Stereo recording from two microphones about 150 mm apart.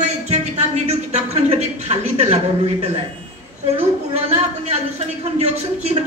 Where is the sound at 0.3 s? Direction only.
45° right (ahead or behind).